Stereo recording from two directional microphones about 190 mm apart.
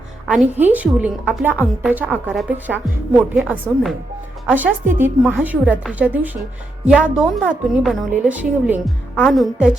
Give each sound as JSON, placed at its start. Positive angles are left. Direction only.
{"t": 0.3, "sound": "a woman's voice", "side_deg": -5}
{"t": 9.1, "sound": "a woman's voice", "side_deg": 0}